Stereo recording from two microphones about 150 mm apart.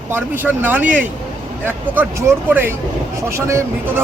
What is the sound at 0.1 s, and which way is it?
Speech, 10° right (ahead or behind).